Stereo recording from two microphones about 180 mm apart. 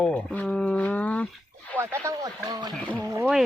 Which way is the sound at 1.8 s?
15° right (ahead or behind).